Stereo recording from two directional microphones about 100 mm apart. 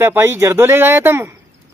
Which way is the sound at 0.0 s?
25° right (ahead or behind).